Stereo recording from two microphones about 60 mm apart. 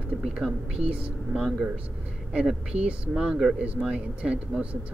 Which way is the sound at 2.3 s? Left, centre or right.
Centre.